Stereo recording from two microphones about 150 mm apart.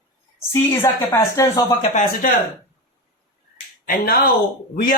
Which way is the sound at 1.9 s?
65° left (ahead or behind).